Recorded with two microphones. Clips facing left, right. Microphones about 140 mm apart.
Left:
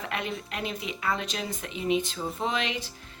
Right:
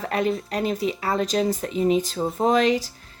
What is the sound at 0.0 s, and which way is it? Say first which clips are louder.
Speech: right 9 dB; 40° right (ahead or behind).